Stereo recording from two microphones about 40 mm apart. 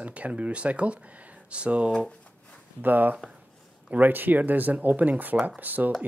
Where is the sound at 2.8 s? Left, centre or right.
Right.